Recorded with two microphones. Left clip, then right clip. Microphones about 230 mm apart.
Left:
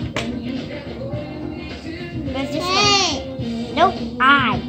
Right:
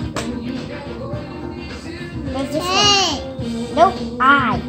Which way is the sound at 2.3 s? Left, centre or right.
Centre.